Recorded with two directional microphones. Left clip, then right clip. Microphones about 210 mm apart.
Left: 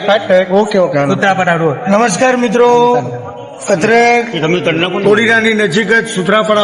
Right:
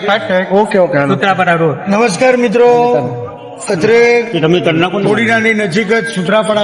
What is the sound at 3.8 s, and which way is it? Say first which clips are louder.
Speech: right 1 dB; centre (ahead or behind).